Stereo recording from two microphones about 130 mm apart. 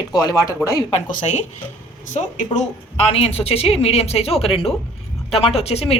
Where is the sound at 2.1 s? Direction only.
70° left (ahead or behind).